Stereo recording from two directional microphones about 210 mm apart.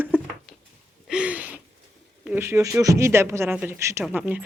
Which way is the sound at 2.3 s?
10° right (ahead or behind).